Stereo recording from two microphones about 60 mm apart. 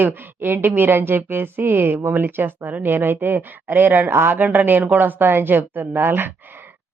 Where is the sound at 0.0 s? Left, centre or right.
Right.